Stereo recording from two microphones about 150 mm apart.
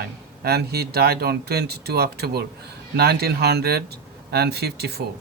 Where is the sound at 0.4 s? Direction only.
90° right.